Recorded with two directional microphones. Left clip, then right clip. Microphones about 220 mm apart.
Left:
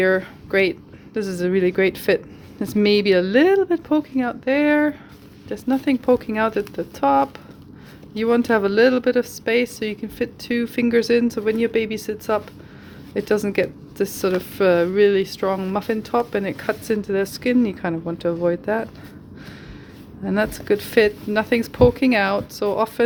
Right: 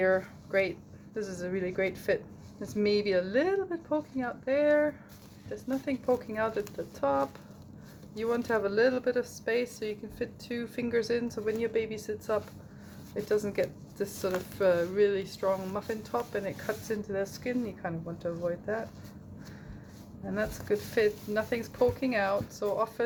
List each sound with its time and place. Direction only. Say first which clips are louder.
0.0 s speech: left 8 dB; 45° left (ahead or behind)
20.2 s speech: left 12 dB; 45° left (ahead or behind)